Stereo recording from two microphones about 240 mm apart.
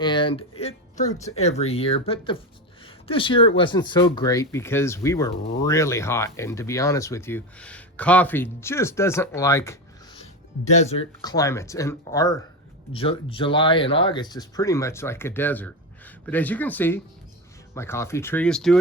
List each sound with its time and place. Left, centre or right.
0.0 s speech: centre
10.7 s speech: left; by 18.8 s centre